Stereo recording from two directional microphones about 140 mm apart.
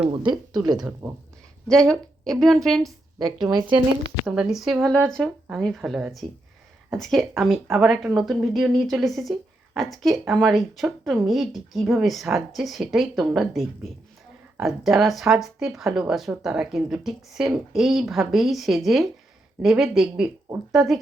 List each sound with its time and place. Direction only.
0.1 s speech: 35° right (ahead or behind)
1.6 s a woman's voice: 5° left (ahead or behind)
4.3 s a woman's voice: 5° right (ahead or behind)